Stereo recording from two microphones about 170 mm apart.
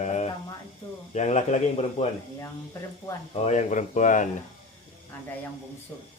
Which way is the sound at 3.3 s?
40° left (ahead or behind).